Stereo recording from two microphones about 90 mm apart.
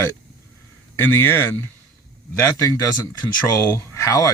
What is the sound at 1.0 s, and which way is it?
Speech, 25° left (ahead or behind).